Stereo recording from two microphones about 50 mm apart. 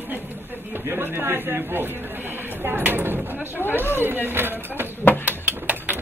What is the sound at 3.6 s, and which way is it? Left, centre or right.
Speech, centre.